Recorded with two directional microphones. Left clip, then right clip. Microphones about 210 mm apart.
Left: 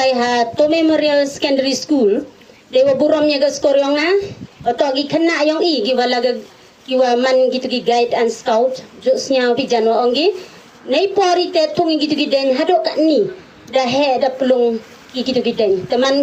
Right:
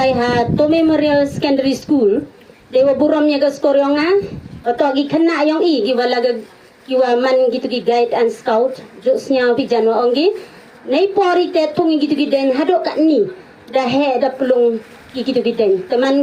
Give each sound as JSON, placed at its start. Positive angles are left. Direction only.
{"t": 0.0, "sound": "a woman's voice", "side_deg": -50}
{"t": 9.3, "sound": "a woman's voice", "side_deg": -45}